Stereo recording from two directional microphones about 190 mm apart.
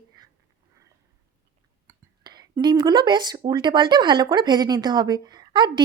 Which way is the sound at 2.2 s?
25° right (ahead or behind).